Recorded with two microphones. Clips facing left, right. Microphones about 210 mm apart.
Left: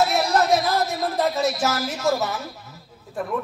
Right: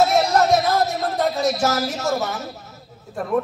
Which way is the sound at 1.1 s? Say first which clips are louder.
Right 1 dB; centre (ahead or behind).